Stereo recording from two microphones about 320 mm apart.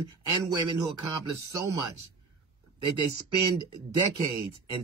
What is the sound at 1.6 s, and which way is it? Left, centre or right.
Speech, right.